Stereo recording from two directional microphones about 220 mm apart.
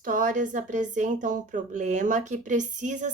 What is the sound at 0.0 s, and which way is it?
A woman's voice, 35° right (ahead or behind).